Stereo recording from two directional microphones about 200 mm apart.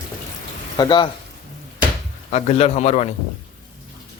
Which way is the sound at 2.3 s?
35° left (ahead or behind).